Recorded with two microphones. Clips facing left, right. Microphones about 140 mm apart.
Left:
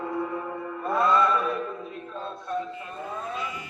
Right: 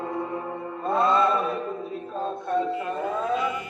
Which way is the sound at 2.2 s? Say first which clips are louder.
Right 6 dB; 55° right (ahead or behind).